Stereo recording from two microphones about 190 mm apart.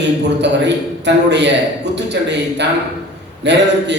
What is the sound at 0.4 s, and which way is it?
A man's voice, 65° right (ahead or behind).